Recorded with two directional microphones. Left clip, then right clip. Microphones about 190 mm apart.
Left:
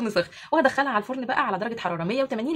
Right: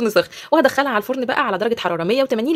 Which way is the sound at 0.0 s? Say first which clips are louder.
Right 8 dB; 45° right (ahead or behind).